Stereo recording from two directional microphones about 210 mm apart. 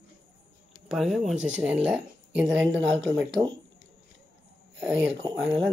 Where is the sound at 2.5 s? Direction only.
60° right (ahead or behind).